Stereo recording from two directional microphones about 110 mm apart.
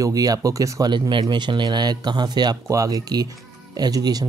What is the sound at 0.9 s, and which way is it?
Speech, 40° right (ahead or behind).